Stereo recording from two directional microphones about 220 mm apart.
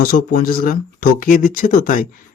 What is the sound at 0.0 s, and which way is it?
Speech, 40° left (ahead or behind).